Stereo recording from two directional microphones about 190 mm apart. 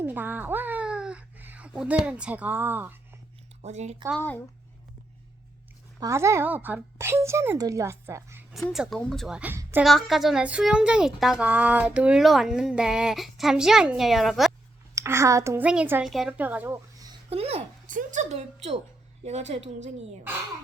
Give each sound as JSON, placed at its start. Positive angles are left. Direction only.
{"t": 0.0, "sound": "speech", "side_deg": -10}
{"t": 3.6, "sound": "speech", "side_deg": -35}
{"t": 6.0, "sound": "a woman's voice", "side_deg": -15}
{"t": 8.5, "sound": "speech", "side_deg": 0}
{"t": 14.9, "sound": "a woman's voice", "side_deg": -15}
{"t": 17.2, "sound": "speech", "side_deg": -30}
{"t": 17.8, "sound": "speech", "side_deg": -40}